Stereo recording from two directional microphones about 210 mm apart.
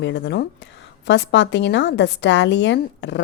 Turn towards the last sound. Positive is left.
turn(degrees=60)  # may be behind; listen again after turning